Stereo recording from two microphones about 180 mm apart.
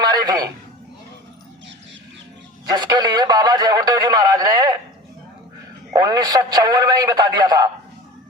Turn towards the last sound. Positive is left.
turn(degrees=-20)  # may be behind; listen again after turning